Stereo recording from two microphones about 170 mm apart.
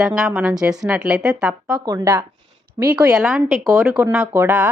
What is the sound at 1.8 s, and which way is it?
Speech, 20° right (ahead or behind).